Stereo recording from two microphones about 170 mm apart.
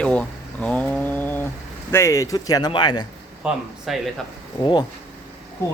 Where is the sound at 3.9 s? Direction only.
Centre (ahead or behind).